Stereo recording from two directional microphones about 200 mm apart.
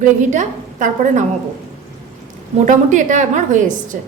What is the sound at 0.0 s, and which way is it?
A woman's voice, 40° right (ahead or behind).